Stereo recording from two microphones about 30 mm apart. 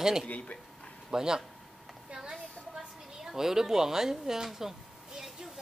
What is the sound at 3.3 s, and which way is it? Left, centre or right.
Speech, centre.